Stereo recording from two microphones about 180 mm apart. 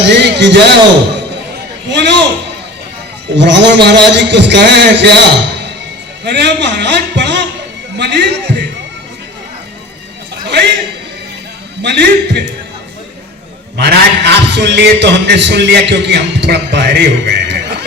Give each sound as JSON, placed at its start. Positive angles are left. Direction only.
{"t": 0.1, "sound": "a man's voice", "side_deg": -70}
{"t": 1.9, "sound": "a sound", "side_deg": -75}
{"t": 3.3, "sound": "a man's voice", "side_deg": -75}
{"t": 6.2, "sound": "a man's voice", "side_deg": -70}
{"t": 11.8, "sound": "a man's voice", "side_deg": -70}
{"t": 13.7, "sound": "a man's voice", "side_deg": -65}